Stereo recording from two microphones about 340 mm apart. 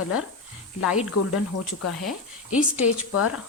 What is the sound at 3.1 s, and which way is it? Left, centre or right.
Speech, left.